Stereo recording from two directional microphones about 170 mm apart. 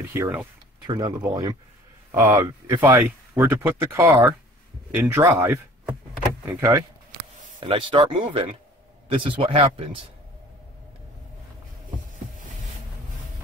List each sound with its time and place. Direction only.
0.1 s speech: 10° right (ahead or behind)
0.8 s speech: 25° right (ahead or behind)
7.6 s speech: 30° right (ahead or behind)